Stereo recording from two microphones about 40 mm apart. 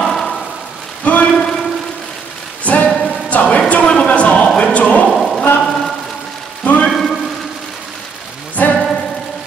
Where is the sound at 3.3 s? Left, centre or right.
Left.